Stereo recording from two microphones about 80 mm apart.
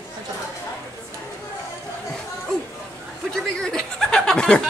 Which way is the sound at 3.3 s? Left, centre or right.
Centre.